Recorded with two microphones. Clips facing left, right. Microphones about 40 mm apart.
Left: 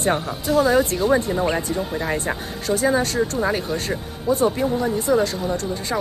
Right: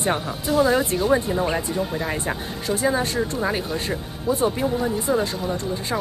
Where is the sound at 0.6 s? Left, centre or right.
Centre.